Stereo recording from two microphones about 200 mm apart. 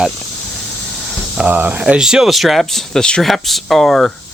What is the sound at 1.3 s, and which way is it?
Speech, 5° right (ahead or behind).